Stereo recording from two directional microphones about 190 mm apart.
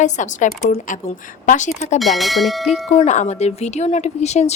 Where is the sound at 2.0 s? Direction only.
Centre (ahead or behind).